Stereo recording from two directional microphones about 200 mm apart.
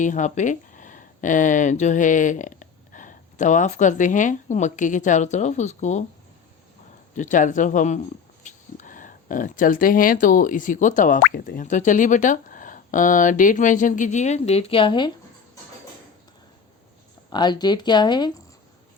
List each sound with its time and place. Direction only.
0.0 s speech: 40° left (ahead or behind)
7.1 s speech: 40° left (ahead or behind)
17.2 s speech: 20° left (ahead or behind)